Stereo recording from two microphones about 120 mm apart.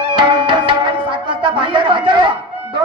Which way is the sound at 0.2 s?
40° right (ahead or behind).